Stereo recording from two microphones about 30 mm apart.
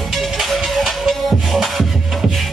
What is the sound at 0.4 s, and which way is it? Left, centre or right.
Music, centre.